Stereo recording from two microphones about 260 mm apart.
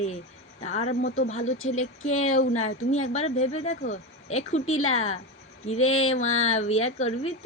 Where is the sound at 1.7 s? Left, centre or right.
Left.